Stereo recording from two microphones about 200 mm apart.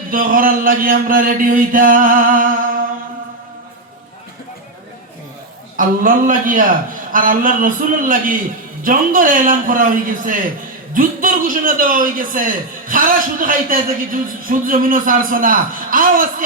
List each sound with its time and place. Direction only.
0.1 s a man's voice: 45° right (ahead or behind)
5.7 s a man's voice: 40° right (ahead or behind)